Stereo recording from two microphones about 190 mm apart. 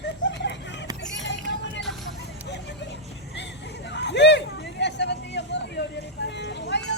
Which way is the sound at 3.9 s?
65° left (ahead or behind).